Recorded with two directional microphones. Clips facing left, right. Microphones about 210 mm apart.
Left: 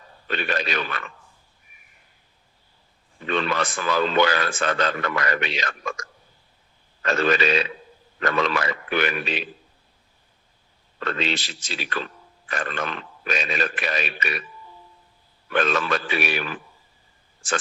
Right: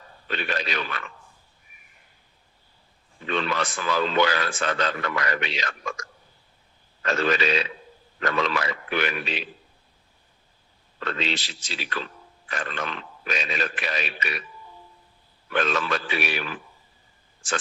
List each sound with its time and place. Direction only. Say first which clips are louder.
0.3 s speech: left 3 dB; 55° left (ahead or behind)
3.2 s speech: left 2 dB; 55° left (ahead or behind)
11.0 s speech: left 2 dB; 55° left (ahead or behind)
15.5 s speech: left 2 dB; 50° left (ahead or behind)